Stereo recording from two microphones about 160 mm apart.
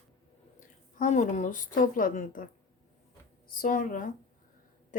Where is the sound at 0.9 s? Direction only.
50° left (ahead or behind).